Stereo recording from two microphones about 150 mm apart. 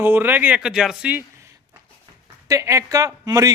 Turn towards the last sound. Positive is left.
turn(degrees=-20)  # may be behind; listen again after turning